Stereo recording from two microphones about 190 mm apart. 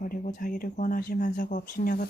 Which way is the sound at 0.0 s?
45° left (ahead or behind).